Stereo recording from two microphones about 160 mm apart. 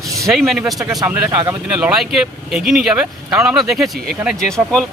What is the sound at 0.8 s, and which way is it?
Speech, 25° right (ahead or behind).